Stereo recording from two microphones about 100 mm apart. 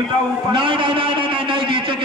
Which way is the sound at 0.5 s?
60° right (ahead or behind).